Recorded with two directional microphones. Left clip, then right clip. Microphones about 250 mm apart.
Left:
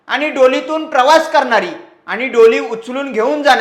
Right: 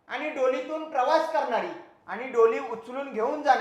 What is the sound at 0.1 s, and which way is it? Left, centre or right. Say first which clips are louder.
Speech: left 15 dB; left.